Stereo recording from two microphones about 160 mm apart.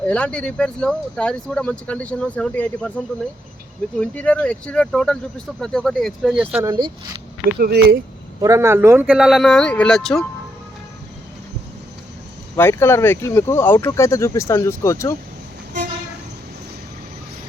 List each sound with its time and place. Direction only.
0.1 s speech: 5° left (ahead or behind)
4.0 s speech: 10° left (ahead or behind)
6.6 s speech: 25° right (ahead or behind)
7.6 s speech: 90° right
8.4 s speech: 20° right (ahead or behind); by 10.2 s centre (ahead or behind)
12.5 s speech: 15° left (ahead or behind)